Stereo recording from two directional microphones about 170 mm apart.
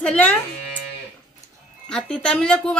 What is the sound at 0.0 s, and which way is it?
Speech, 5° left (ahead or behind).